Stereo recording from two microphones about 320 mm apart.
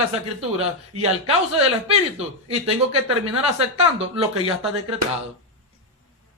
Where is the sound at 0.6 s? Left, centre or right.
Centre.